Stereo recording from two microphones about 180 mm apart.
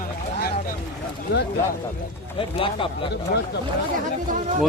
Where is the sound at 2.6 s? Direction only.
30° left (ahead or behind).